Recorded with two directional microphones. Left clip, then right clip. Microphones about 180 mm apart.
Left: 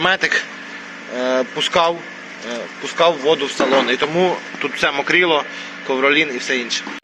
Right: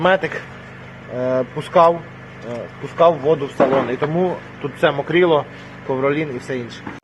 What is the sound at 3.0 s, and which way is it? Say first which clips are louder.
Speech: right 1 dB; 10° right (ahead or behind).